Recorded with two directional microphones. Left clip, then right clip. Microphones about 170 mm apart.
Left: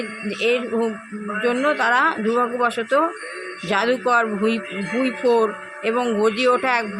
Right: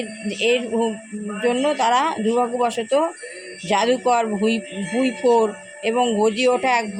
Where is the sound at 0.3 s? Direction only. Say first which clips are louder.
Right 1 dB; 10° left (ahead or behind).